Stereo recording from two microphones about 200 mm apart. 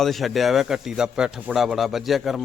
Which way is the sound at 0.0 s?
Centre (ahead or behind).